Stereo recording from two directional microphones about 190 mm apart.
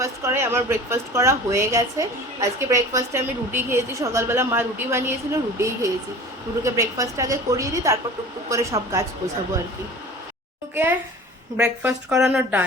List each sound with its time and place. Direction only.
0.0 s a woman's voice: 15° right (ahead or behind)
11.5 s a woman's voice: 10° right (ahead or behind)